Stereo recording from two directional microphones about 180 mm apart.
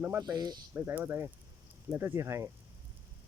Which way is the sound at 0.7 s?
10° right (ahead or behind).